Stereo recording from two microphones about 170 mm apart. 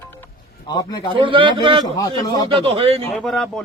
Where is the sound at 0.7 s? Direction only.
25° left (ahead or behind).